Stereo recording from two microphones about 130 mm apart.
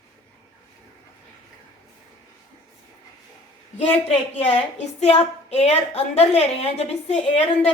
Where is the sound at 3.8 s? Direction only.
55° left (ahead or behind).